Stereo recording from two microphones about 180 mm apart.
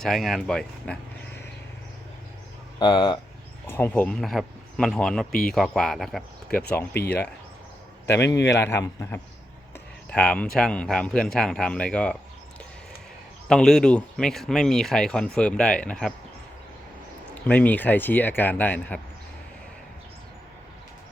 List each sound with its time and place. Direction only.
0.0 s speech: centre (ahead or behind)
2.7 s speech: 25° left (ahead or behind)
3.7 s speech: 10° left (ahead or behind)
7.0 s speech: 10° left (ahead or behind)
8.4 s speech: 15° left (ahead or behind)
13.5 s speech: 5° left (ahead or behind)
17.5 s speech: 10° left (ahead or behind)